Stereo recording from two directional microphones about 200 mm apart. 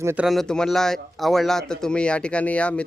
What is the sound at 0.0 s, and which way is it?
Speech, 10° right (ahead or behind).